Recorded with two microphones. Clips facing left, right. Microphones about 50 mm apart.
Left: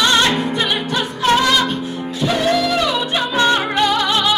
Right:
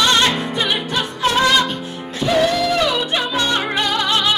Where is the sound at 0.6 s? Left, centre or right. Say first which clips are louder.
Left 1 dB; left.